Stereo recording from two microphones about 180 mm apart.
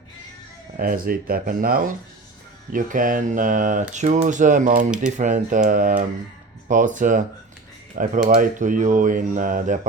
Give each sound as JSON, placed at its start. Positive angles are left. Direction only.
{"t": 0.8, "sound": "speech", "side_deg": -55}